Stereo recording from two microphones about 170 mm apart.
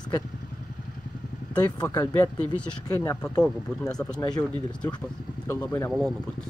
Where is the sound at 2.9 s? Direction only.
20° left (ahead or behind).